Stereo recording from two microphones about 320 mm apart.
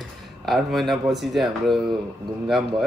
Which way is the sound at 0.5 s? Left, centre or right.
Centre.